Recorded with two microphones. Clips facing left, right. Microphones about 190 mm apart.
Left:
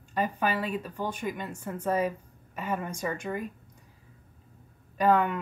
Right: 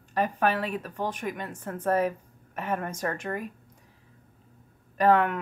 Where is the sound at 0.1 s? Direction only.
65° right (ahead or behind).